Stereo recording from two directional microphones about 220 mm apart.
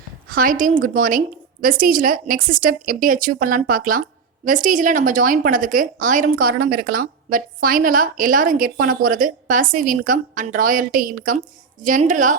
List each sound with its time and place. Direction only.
0.3 s a woman's voice: 40° right (ahead or behind)